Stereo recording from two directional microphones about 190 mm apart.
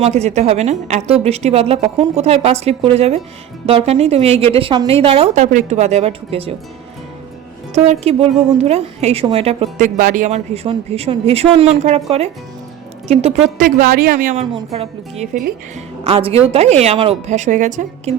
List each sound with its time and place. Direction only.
0.0 s speech: 35° right (ahead or behind)
7.7 s speech: 35° right (ahead or behind)
13.7 s a woman's voice: 50° right (ahead or behind)
14.7 s speech: 35° right (ahead or behind)